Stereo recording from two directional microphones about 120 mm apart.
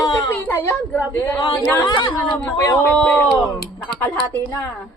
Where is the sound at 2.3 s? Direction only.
10° left (ahead or behind).